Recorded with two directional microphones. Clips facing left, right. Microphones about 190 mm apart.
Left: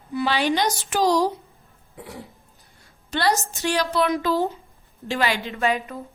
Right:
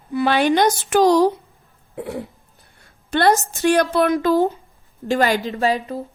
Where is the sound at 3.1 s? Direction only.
55° right (ahead or behind); by 6.0 s 35° right (ahead or behind).